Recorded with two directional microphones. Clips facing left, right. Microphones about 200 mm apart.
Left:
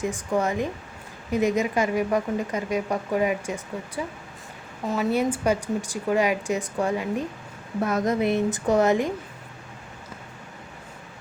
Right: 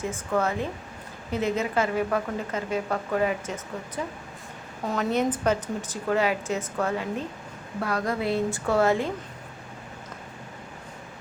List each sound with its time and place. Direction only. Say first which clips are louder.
0.0 s a woman's voice: left 2 dB; 15° left (ahead or behind)